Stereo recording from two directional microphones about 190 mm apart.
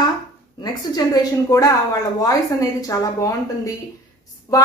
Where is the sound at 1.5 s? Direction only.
20° left (ahead or behind).